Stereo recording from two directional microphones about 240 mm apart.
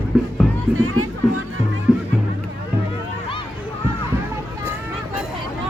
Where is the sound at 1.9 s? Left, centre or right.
Centre.